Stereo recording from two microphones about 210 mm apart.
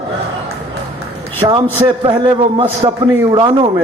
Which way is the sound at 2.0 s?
25° right (ahead or behind).